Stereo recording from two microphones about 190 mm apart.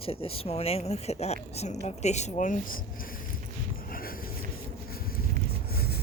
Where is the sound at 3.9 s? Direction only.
50° left (ahead or behind).